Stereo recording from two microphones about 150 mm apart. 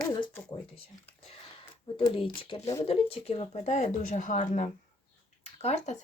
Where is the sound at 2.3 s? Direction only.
35° left (ahead or behind); by 4.7 s 60° left (ahead or behind).